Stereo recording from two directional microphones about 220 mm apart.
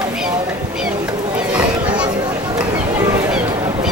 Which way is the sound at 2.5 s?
15° right (ahead or behind).